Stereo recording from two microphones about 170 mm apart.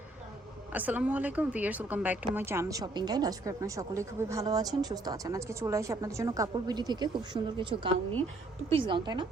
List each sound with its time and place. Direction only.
0.7 s speech: 10° right (ahead or behind); by 9.2 s 30° right (ahead or behind)